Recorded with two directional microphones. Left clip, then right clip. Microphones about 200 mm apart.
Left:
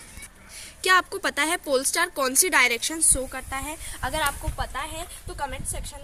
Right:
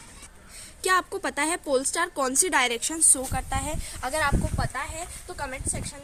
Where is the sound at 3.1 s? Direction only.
60° right (ahead or behind).